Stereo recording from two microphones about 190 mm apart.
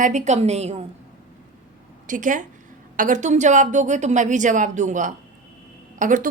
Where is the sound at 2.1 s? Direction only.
45° right (ahead or behind).